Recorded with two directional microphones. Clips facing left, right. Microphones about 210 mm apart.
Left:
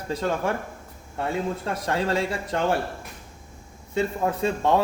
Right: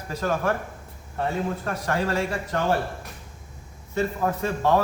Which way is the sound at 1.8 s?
25° left (ahead or behind).